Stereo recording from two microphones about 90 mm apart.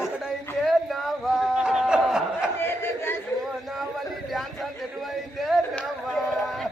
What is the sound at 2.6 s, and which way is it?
Battle cry, 25° left (ahead or behind).